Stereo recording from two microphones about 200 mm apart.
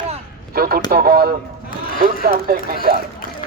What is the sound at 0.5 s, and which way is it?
Speech, 50° right (ahead or behind).